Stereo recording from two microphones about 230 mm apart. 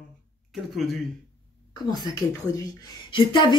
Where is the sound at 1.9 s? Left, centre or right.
Centre.